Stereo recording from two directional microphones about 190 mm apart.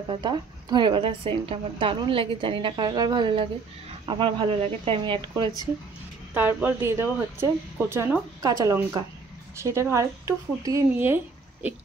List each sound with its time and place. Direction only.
0.1 s a woman's voice: 20° right (ahead or behind)
6.3 s speech: 10° right (ahead or behind)